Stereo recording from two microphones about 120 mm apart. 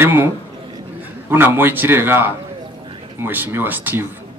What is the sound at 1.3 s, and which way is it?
Speech, 15° right (ahead or behind).